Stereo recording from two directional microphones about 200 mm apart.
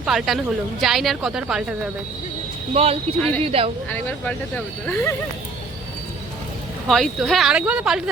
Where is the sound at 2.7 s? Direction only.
30° right (ahead or behind).